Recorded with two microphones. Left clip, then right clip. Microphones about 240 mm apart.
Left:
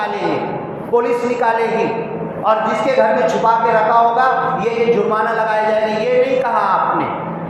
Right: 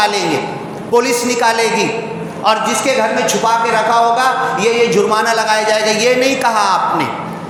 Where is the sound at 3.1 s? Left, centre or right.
Right.